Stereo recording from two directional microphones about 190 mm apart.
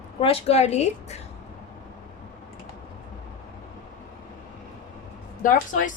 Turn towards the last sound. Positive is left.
turn(degrees=45)  # may be behind; listen again after turning